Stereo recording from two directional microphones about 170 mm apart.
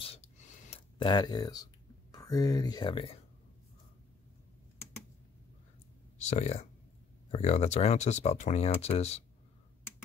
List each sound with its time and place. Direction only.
0.9 s speech: 25° left (ahead or behind)
6.1 s speech: 45° left (ahead or behind)